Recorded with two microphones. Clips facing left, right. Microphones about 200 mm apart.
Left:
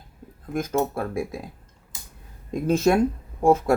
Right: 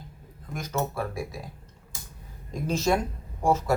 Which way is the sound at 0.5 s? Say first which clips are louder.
Left 6 dB; 50° left (ahead or behind).